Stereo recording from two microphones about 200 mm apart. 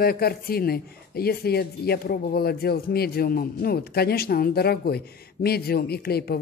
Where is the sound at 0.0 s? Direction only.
50° left (ahead or behind).